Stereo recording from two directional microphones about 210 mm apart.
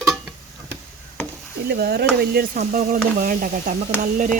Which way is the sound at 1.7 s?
50° right (ahead or behind).